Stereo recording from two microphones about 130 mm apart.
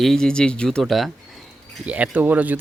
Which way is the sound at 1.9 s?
10° right (ahead or behind).